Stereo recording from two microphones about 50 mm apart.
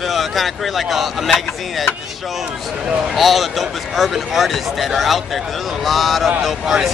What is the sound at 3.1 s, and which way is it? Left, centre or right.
Speech, centre.